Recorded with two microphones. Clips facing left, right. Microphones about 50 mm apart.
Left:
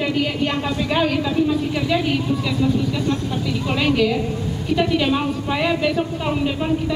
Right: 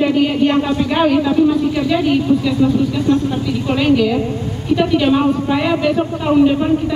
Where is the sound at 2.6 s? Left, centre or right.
Centre.